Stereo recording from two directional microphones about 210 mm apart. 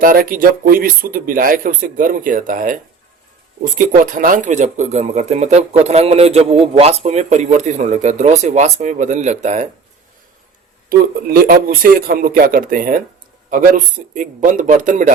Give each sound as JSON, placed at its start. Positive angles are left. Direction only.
{"t": 0.0, "sound": "speech", "side_deg": -40}
{"t": 10.8, "sound": "a man's voice", "side_deg": -45}